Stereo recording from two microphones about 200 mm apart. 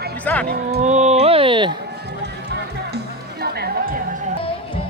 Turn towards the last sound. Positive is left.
turn(degrees=-50)  # may be behind; listen again after turning